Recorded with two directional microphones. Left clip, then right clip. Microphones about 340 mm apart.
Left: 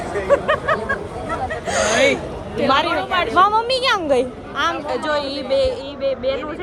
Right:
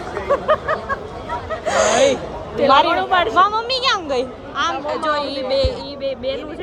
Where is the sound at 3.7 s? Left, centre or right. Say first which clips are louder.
Left 2 dB; centre.